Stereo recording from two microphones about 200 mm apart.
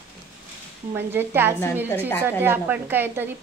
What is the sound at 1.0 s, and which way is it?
Speech, 10° right (ahead or behind).